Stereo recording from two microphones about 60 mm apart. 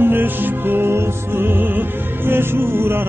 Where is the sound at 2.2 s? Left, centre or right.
Right.